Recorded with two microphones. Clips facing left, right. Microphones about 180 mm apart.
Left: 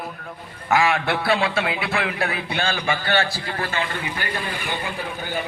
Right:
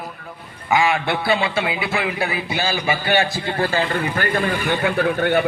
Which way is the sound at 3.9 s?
55° right (ahead or behind).